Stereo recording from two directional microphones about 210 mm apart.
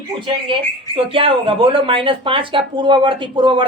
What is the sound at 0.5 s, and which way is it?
Speech, 25° right (ahead or behind).